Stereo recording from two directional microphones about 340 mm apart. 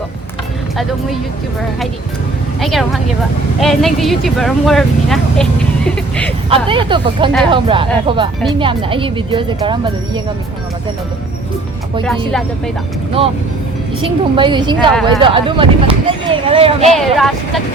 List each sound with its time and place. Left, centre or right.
2.6 s speech: centre
6.5 s a woman's voice: centre
13.2 s a woman's voice: centre
16.9 s speech: centre